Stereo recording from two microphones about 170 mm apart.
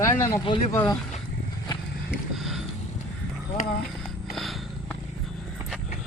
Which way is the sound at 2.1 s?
Centre (ahead or behind).